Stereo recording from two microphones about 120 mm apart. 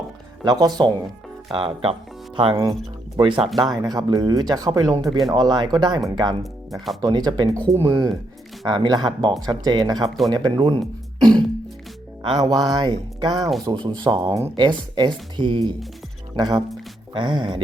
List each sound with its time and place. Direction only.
0.4 s speech: 35° right (ahead or behind)
1.5 s speech: 50° right (ahead or behind); by 7.6 s 35° right (ahead or behind)
7.7 s speech: 20° right (ahead or behind)
8.6 s speech: 40° right (ahead or behind)
11.2 s music: 35° right (ahead or behind)
12.2 s speech: 40° right (ahead or behind)
13.3 s speech: centre (ahead or behind)
13.7 s speech: 35° right (ahead or behind)